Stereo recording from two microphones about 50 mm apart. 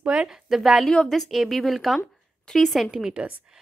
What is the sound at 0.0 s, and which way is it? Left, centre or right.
Speech, right.